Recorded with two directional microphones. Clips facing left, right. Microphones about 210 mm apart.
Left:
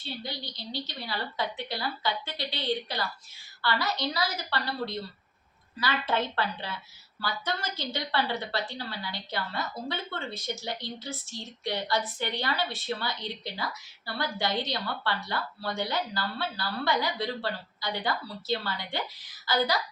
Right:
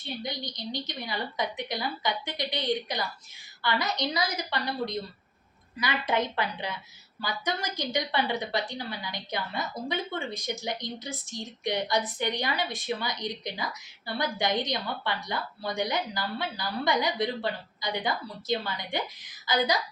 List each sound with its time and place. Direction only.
0.0 s a woman's voice: 15° right (ahead or behind)